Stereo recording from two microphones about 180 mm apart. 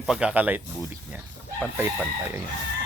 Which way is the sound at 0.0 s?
5° right (ahead or behind).